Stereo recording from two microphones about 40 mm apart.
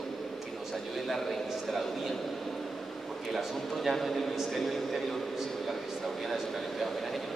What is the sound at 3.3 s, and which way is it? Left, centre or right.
Speech, centre.